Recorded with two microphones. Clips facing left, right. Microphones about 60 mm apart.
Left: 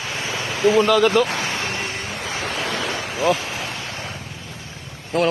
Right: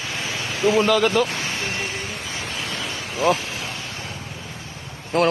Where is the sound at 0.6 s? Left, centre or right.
Centre.